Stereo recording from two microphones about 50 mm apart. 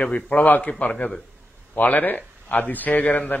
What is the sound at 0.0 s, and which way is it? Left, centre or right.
A man's voice, left.